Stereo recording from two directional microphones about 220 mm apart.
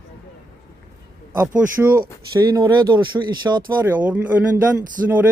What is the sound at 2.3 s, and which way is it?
Speech, 15° right (ahead or behind).